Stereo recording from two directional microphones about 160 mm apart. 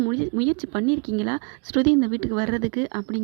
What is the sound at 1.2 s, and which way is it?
A woman's voice, 30° right (ahead or behind).